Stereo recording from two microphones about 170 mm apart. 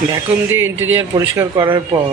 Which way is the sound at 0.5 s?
15° right (ahead or behind).